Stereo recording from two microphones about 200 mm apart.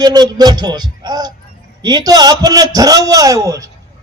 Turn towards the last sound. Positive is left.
turn(degrees=-15)  # may be behind; listen again after turning